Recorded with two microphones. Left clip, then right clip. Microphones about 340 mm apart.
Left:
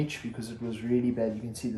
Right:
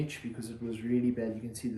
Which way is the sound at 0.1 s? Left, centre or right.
Centre.